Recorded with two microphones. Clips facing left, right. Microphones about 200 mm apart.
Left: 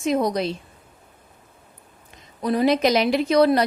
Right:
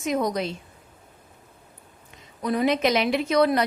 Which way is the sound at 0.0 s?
30° left (ahead or behind).